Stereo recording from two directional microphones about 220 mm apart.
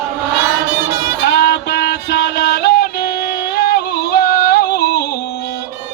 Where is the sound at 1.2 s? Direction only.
50° left (ahead or behind).